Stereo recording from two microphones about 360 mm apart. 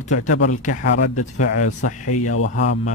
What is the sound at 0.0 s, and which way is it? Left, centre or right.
A man's voice, centre.